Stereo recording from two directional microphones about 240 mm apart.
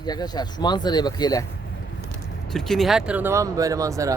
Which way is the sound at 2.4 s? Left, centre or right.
Centre.